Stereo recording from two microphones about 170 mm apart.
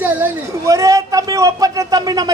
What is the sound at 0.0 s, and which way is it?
Speech, 15° right (ahead or behind).